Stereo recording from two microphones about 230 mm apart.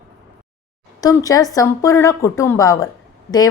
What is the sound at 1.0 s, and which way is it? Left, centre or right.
A woman's voice, centre.